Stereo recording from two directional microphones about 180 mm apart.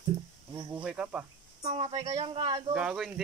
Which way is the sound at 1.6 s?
35° right (ahead or behind).